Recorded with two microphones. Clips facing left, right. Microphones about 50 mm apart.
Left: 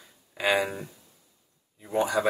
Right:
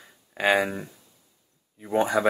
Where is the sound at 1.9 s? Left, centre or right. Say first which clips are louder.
Right 3 dB; right.